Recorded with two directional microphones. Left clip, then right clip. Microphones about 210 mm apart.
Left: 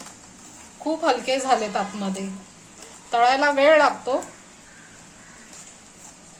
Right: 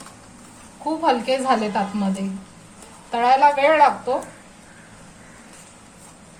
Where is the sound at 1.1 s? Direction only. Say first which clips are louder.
Right 2 dB; 30° left (ahead or behind).